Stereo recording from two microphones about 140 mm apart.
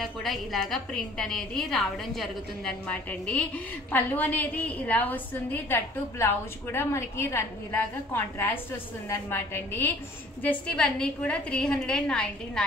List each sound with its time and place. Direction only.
0.0 s a woman's voice: centre (ahead or behind)